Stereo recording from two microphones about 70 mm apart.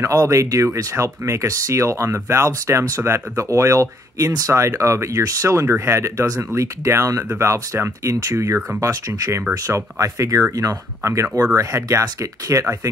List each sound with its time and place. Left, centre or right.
0.0 s speech: right
11.0 s speech: right